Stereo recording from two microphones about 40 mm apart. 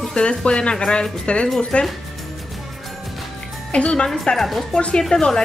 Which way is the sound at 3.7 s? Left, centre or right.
Left.